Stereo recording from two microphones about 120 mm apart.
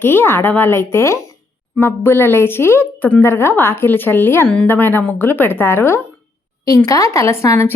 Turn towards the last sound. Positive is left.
turn(degrees=20)  # may be behind; listen again after turning